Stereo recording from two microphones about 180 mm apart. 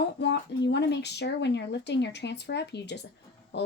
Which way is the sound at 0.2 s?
70° left (ahead or behind).